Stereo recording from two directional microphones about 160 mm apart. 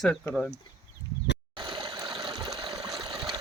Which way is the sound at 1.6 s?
30° right (ahead or behind).